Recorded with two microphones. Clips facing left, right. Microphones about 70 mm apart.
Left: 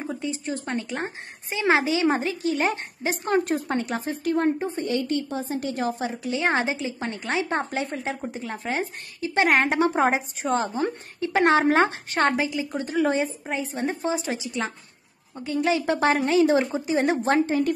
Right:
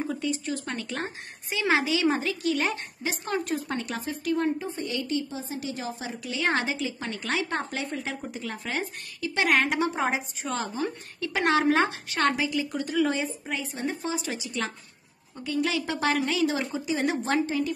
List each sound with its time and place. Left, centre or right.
0.0 s a woman's voice: left
6.2 s a woman's voice: left